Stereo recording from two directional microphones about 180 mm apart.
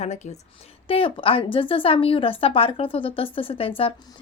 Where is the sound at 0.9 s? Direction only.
30° left (ahead or behind).